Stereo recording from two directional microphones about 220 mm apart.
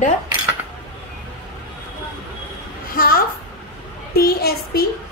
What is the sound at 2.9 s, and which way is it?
A woman's voice, 40° left (ahead or behind).